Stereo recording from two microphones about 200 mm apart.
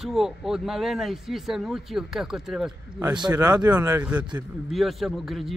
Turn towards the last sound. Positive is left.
turn(degrees=0)  # may be behind; listen again after turning